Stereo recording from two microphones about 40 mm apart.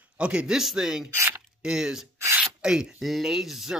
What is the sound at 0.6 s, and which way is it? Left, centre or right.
Speech, centre.